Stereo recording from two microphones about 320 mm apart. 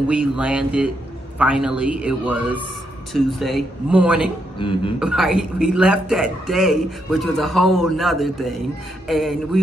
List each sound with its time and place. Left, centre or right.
0.1 s a man's voice: centre
4.6 s speech: centre
5.0 s a man's voice: centre